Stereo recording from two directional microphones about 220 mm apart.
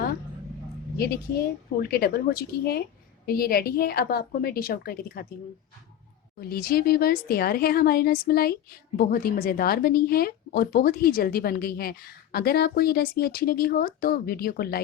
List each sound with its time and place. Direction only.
1.8 s a woman's voice: 45° left (ahead or behind)
6.4 s a woman's voice: 45° left (ahead or behind)